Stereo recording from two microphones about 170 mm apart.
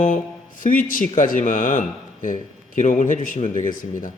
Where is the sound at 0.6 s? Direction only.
50° left (ahead or behind).